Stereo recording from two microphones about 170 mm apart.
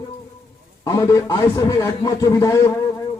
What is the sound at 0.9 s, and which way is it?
A man's voice, 20° left (ahead or behind).